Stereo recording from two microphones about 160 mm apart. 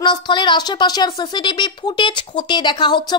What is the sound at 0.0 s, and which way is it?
A woman's voice, 30° left (ahead or behind).